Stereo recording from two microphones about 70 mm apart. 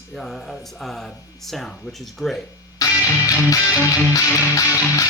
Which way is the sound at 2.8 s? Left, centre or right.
Left.